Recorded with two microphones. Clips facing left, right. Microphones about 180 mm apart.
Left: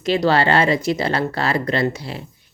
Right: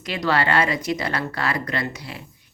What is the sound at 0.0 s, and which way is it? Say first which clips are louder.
Speech: left 6 dB; 30° left (ahead or behind).